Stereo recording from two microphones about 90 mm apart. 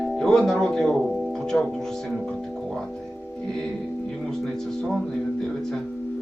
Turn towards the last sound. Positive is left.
turn(degrees=0)  # may be behind; listen again after turning